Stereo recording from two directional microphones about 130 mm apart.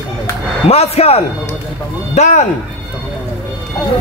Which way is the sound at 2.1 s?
65° left (ahead or behind).